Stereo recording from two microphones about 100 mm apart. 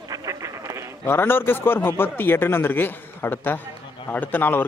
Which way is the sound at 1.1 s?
20° left (ahead or behind).